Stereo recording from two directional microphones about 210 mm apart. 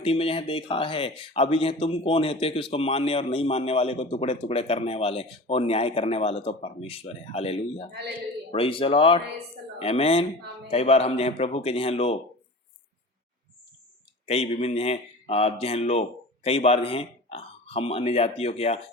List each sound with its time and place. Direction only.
0.0 s speech: 25° left (ahead or behind)
14.3 s speech: 30° left (ahead or behind)